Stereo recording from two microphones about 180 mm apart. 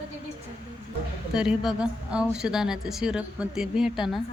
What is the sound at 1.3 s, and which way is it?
A woman's voice, 5° right (ahead or behind).